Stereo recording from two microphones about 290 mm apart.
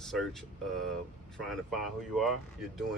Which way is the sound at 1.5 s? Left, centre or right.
Centre.